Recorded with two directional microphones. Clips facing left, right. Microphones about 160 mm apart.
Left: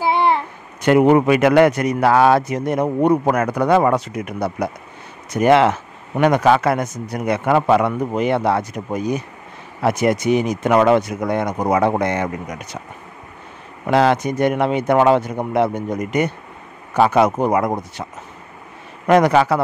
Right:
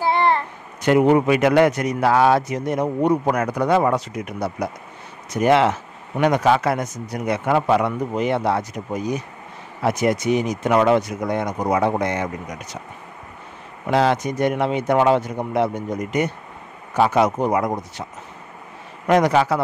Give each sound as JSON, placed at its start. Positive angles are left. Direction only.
{"t": 0.0, "sound": "a sound", "side_deg": 10}
{"t": 0.8, "sound": "a man's voice", "side_deg": 60}
{"t": 9.8, "sound": "a man's voice", "side_deg": 60}
{"t": 13.8, "sound": "a man's voice", "side_deg": 60}
{"t": 19.0, "sound": "a man's voice", "side_deg": 60}